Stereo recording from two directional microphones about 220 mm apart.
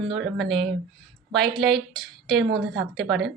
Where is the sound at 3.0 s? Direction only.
50° right (ahead or behind).